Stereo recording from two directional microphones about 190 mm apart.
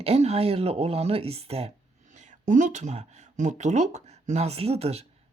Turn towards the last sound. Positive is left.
turn(degrees=-35)  # may be behind; listen again after turning